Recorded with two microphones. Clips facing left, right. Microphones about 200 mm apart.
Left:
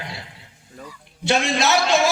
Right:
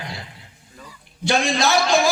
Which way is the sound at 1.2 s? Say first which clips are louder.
Even; 25° left (ahead or behind).